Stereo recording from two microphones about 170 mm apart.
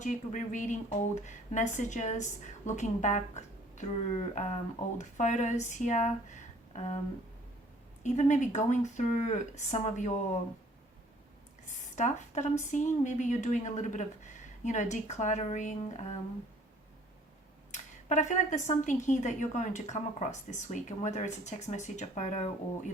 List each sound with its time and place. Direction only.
0.0 s a woman's voice: 45° left (ahead or behind)
8.0 s a woman's voice: 45° left (ahead or behind)
11.9 s a woman's voice: 45° left (ahead or behind)
17.7 s a woman's voice: 45° left (ahead or behind)